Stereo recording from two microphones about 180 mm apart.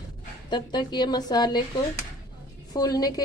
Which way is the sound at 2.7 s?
20° left (ahead or behind).